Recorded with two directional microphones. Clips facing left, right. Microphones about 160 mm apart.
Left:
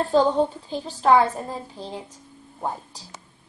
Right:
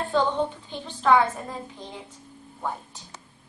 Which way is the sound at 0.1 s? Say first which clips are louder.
Left 4 dB; 35° left (ahead or behind).